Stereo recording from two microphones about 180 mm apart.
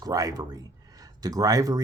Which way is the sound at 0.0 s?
20° right (ahead or behind).